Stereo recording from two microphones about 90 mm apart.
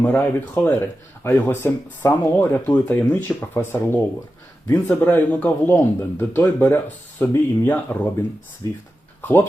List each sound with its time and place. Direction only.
0.0 s speech: 20° left (ahead or behind)
8.6 s speech: 35° left (ahead or behind)
9.2 s speech: 25° left (ahead or behind)